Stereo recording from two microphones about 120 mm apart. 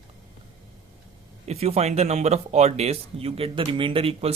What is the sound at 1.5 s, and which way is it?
Speech, 60° right (ahead or behind).